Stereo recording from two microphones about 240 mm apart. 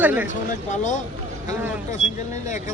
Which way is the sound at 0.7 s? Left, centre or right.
Left.